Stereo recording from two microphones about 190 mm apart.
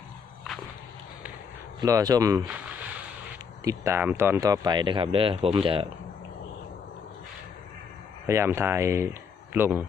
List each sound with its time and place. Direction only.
1.8 s speech: 20° right (ahead or behind)
3.6 s speech: 15° right (ahead or behind)
8.3 s speech: 15° right (ahead or behind)